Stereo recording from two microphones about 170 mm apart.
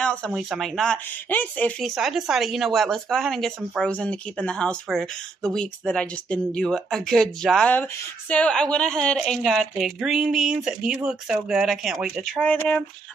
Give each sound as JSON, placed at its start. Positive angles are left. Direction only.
{"t": 0.0, "sound": "a sound", "side_deg": 5}
{"t": 0.3, "sound": "speech", "side_deg": 0}
{"t": 2.0, "sound": "speech", "side_deg": 0}